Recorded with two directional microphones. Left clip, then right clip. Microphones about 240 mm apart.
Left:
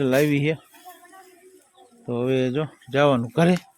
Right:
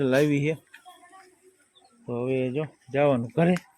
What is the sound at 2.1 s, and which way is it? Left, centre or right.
Speech, left.